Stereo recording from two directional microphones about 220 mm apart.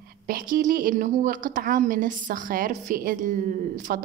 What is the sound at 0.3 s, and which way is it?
A woman's voice, 40° right (ahead or behind).